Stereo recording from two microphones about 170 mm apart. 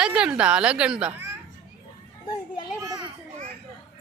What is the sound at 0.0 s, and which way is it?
A woman's voice, 5° right (ahead or behind).